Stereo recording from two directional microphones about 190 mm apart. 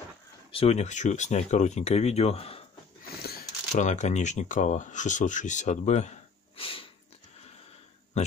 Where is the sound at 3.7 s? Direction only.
40° left (ahead or behind).